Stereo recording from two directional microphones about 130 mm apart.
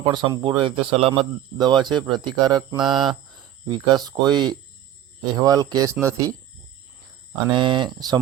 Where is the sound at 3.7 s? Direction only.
30° right (ahead or behind).